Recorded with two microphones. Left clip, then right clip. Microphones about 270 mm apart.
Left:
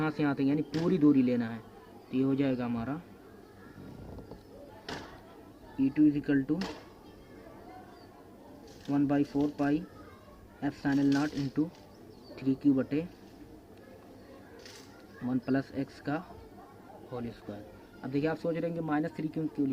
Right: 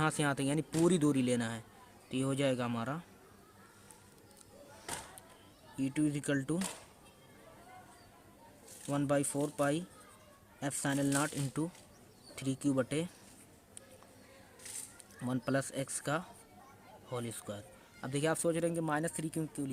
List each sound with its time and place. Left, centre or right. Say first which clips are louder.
0.0 s speech: left 2 dB; right
5.8 s speech: left 8 dB; right
8.9 s speech: left 4 dB; right
15.3 s speech: left 3 dB; right